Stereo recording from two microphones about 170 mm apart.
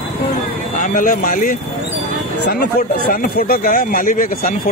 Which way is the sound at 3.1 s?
60° left (ahead or behind).